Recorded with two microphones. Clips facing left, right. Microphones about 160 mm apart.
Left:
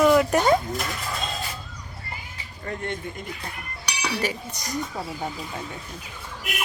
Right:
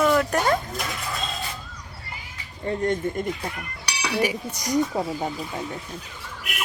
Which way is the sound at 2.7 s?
30° right (ahead or behind).